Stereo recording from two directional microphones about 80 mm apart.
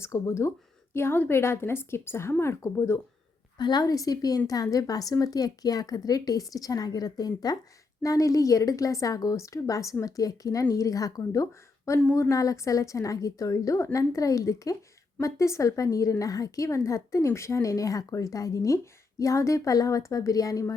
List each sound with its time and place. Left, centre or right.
0.0 s a woman's voice: left
3.6 s a woman's voice: left